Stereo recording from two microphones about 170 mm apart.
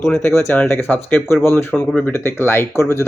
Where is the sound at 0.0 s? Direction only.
10° left (ahead or behind).